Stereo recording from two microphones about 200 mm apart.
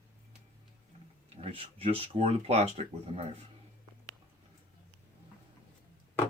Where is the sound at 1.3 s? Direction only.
30° right (ahead or behind).